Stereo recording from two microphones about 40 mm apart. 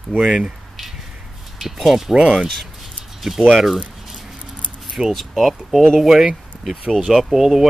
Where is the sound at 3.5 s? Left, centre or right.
Centre.